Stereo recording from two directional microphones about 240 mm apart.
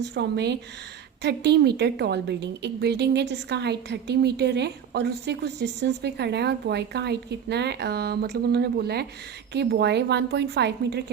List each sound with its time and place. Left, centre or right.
0.0 s a woman's voice: right